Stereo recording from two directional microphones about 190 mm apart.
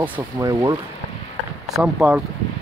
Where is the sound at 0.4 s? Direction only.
15° right (ahead or behind).